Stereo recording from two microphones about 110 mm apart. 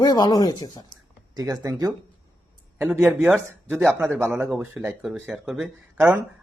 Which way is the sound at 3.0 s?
20° right (ahead or behind).